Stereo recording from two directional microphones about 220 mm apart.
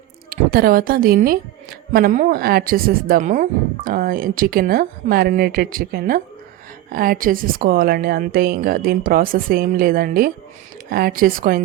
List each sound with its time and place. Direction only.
0.3 s a woman's voice: 40° right (ahead or behind)